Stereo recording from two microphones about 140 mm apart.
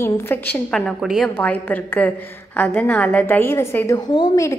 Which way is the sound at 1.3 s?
10° left (ahead or behind).